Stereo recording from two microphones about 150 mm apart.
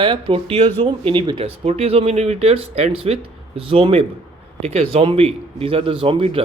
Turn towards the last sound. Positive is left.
turn(degrees=-40)  # may be behind; listen again after turning